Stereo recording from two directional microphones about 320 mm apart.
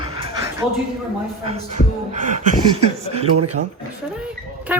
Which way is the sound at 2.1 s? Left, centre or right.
Right.